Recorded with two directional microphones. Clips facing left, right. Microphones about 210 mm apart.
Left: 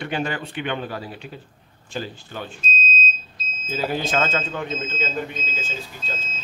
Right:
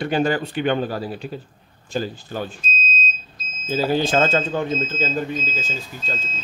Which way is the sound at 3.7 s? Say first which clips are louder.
Right 5 dB; 30° right (ahead or behind).